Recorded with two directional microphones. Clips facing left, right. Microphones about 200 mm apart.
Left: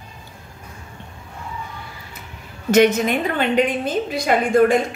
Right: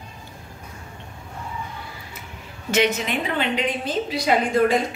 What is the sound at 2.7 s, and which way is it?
A woman's voice, 45° left (ahead or behind).